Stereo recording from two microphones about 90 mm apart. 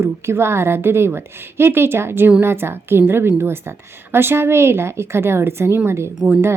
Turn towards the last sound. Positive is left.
turn(degrees=-20)  # may be behind; listen again after turning